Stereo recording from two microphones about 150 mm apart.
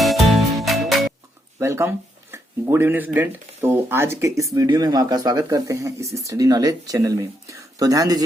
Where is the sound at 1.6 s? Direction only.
20° right (ahead or behind).